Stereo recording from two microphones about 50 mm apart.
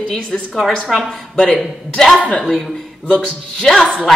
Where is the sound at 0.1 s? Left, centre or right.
Centre.